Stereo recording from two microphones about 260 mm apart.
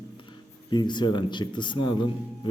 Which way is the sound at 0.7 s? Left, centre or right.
Centre.